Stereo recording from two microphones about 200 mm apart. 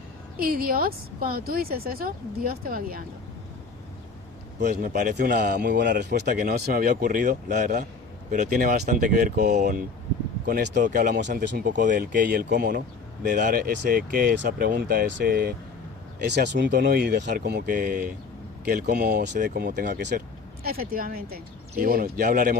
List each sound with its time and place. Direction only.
0.3 s a man's voice: 50° right (ahead or behind)
4.6 s a man's voice: 45° right (ahead or behind)
10.4 s a man's voice: 55° right (ahead or behind)